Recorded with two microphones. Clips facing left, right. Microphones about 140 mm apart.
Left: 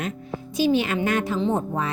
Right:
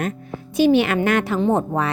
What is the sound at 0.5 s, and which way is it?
A woman's voice, 65° right (ahead or behind).